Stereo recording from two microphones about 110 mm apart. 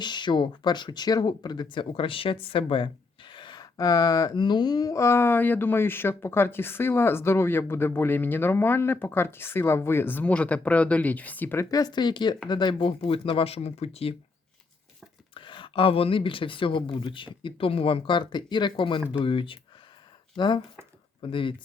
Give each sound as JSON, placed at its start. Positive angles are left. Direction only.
{"t": 0.0, "sound": "speech", "side_deg": 45}
{"t": 11.7, "sound": "speech", "side_deg": 40}
{"t": 13.0, "sound": "speech", "side_deg": 55}
{"t": 15.4, "sound": "speech", "side_deg": 50}